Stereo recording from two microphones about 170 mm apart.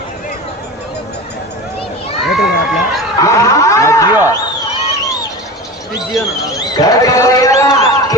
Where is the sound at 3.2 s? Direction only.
20° left (ahead or behind).